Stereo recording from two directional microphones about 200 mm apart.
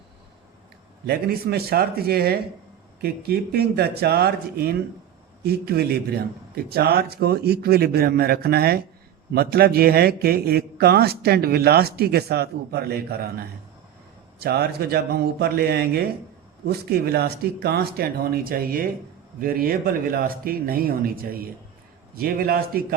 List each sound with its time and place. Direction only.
1.0 s a man's voice: 50° right (ahead or behind)
14.3 s a man's voice: 50° right (ahead or behind)